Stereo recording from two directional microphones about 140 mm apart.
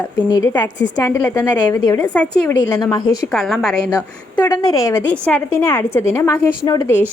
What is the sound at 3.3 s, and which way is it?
Speech, 5° left (ahead or behind).